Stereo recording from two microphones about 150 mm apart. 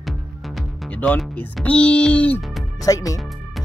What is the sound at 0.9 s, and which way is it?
Speech, 10° left (ahead or behind).